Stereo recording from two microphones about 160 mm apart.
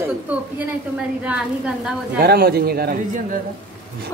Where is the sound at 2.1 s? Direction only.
75° right (ahead or behind).